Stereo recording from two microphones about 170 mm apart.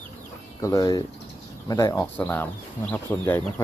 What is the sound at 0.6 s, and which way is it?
Speech, 20° left (ahead or behind).